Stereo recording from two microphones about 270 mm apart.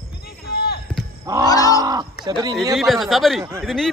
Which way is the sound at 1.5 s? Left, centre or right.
Centre.